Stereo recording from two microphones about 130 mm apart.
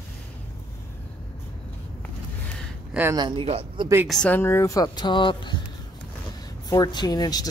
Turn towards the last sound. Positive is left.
turn(degrees=30)  # may be behind; listen again after turning